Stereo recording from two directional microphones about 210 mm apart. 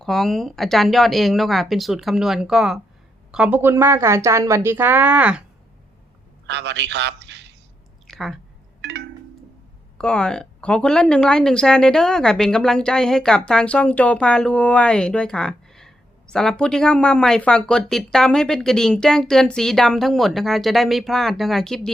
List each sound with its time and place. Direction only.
0.0 s a woman's voice: centre (ahead or behind)
6.4 s a man's voice: 55° right (ahead or behind)
8.0 s a sound: centre (ahead or behind)
8.8 s music: 55° right (ahead or behind)
10.0 s a woman's voice: 5° left (ahead or behind)